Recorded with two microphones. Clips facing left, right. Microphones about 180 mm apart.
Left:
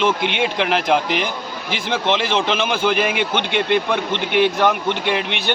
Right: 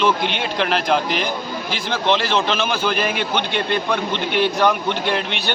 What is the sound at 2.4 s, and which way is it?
A man's voice, 15° left (ahead or behind).